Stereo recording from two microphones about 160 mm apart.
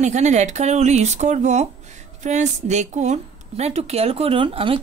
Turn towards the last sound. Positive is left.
turn(degrees=-35)  # may be behind; listen again after turning